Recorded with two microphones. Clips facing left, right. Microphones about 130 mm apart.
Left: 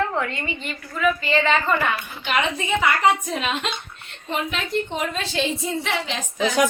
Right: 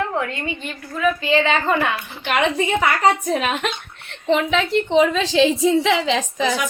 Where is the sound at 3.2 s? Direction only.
50° right (ahead or behind).